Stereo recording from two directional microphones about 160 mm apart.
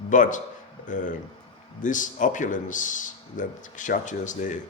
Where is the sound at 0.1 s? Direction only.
55° left (ahead or behind).